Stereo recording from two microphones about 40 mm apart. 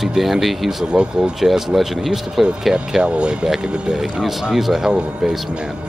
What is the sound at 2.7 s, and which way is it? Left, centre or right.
Speech, right.